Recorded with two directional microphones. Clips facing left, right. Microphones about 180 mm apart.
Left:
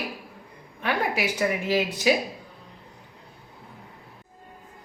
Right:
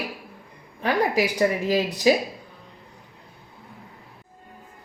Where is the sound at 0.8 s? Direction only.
35° right (ahead or behind).